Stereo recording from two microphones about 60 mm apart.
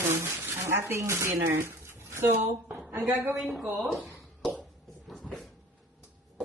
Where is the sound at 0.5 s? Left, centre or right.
Right.